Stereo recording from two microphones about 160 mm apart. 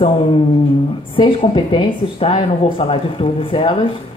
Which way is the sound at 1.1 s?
30° left (ahead or behind).